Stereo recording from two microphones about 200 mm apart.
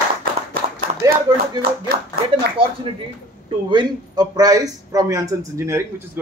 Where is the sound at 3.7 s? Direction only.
20° right (ahead or behind).